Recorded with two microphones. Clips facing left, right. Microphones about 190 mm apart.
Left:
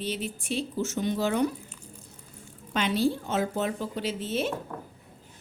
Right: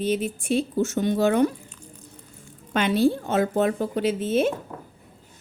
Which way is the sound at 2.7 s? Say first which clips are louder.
Right 5 dB; 55° right (ahead or behind).